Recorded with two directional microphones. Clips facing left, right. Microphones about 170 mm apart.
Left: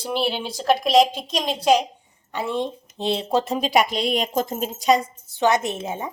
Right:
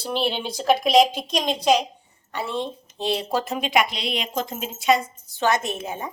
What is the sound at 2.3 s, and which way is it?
A woman's voice, 15° left (ahead or behind).